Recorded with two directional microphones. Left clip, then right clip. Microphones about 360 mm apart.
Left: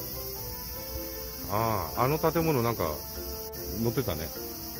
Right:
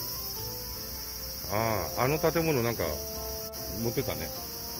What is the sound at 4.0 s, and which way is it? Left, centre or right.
Speech, centre.